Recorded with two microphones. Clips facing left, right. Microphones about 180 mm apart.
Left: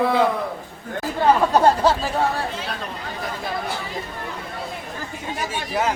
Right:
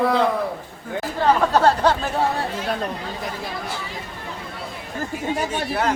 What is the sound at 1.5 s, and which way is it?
Speech, 10° left (ahead or behind).